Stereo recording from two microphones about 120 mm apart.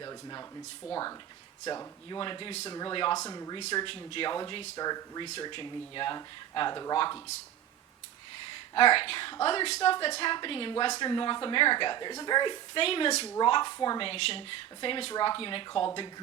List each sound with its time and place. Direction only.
0.0 s a sound: 30° left (ahead or behind)
0.8 s speech: 45° left (ahead or behind)
1.6 s a woman's voice: 35° left (ahead or behind)
3.2 s a woman's voice: 30° left (ahead or behind)
3.8 s speech: 50° left (ahead or behind)
4.8 s a woman's voice: 30° left (ahead or behind)
8.5 s a woman's voice: 45° left (ahead or behind)
13.4 s a woman's voice: 40° left (ahead or behind)
14.0 s speech: 50° left (ahead or behind)